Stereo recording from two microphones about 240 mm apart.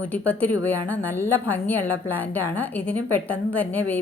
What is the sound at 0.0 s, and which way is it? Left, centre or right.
A woman's voice, centre.